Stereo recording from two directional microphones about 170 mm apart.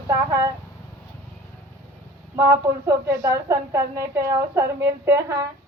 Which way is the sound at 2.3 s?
15° right (ahead or behind).